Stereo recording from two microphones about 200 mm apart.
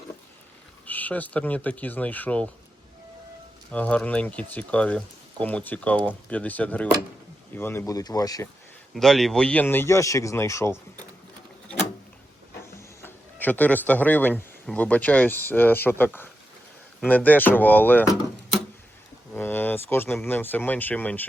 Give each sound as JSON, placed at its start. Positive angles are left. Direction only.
{"t": 0.9, "sound": "speech", "side_deg": 10}
{"t": 3.7, "sound": "speech", "side_deg": 5}
{"t": 9.0, "sound": "speech", "side_deg": 0}
{"t": 13.0, "sound": "speech", "side_deg": 10}
{"t": 19.3, "sound": "a sound", "side_deg": 10}
{"t": 20.2, "sound": "speech", "side_deg": 10}